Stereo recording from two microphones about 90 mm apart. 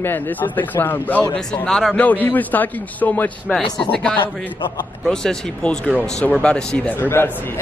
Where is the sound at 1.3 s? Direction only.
10° left (ahead or behind).